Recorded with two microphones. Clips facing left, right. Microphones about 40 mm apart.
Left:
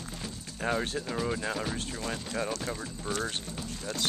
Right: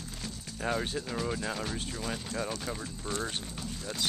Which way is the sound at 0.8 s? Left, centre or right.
Centre.